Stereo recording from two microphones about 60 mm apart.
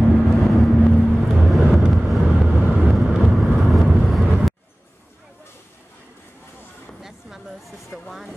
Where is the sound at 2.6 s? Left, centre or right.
Centre.